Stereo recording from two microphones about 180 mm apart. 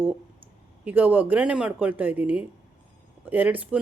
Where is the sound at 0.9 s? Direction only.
10° right (ahead or behind).